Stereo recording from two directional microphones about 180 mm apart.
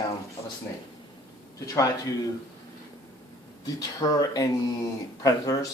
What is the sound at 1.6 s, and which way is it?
Speech, 20° left (ahead or behind).